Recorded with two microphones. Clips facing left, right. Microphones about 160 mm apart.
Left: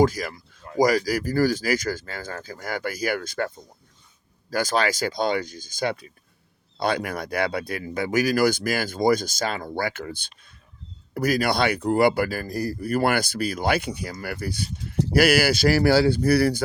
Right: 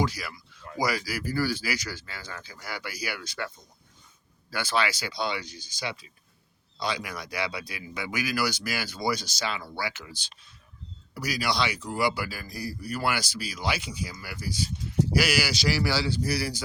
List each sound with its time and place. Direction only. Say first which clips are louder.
0.0 s a sound: left 9 dB; 45° left (ahead or behind)
0.8 s speech: left 9 dB; 45° left (ahead or behind)
4.5 s speech: left 5 dB; 45° left (ahead or behind)